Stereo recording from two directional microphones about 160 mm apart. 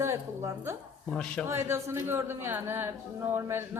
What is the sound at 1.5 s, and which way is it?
A woman's voice, 15° right (ahead or behind).